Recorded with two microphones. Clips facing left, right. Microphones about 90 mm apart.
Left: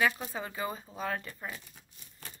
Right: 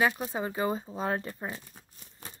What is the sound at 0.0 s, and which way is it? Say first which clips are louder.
Speech: right 3 dB; 20° right (ahead or behind).